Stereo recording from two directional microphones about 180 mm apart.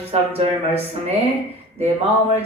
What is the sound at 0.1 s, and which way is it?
Speech, 35° right (ahead or behind).